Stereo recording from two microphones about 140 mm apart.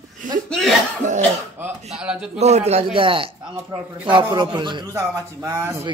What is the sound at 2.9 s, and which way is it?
A man's voice, 40° right (ahead or behind).